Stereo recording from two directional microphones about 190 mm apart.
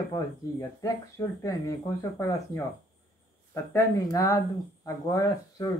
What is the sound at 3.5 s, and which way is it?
Speech, 15° left (ahead or behind).